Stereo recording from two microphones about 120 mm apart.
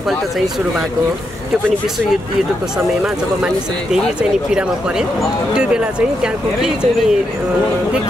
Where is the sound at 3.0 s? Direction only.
5° right (ahead or behind).